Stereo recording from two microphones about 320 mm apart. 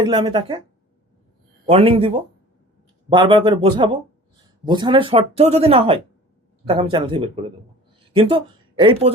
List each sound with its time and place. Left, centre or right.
0.0 s speech: centre
1.6 s speech: centre